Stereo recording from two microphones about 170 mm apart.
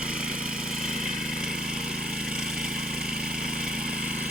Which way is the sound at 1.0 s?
5° right (ahead or behind).